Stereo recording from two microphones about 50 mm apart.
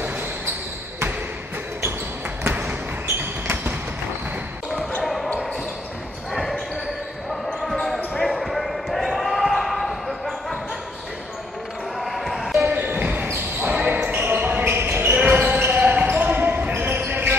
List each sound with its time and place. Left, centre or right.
2.4 s basketball bounce: right
5.0 s basketball bounce: centre
8.3 s basketball bounce: centre
8.5 s basketball bounce: centre
12.0 s basketball bounce: centre
12.6 s basketball bounce: right